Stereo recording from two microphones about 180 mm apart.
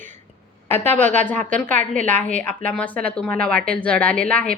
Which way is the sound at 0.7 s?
35° right (ahead or behind).